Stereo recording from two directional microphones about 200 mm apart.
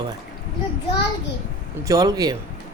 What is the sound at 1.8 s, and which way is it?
Speech, 20° right (ahead or behind).